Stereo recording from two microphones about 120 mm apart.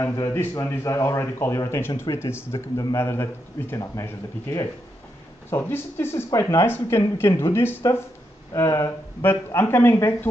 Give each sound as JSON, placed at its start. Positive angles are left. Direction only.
{"t": 0.0, "sound": "speech", "side_deg": 25}